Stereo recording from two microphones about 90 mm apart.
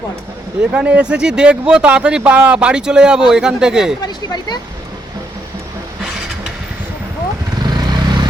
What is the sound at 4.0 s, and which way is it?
Speech, 50° left (ahead or behind).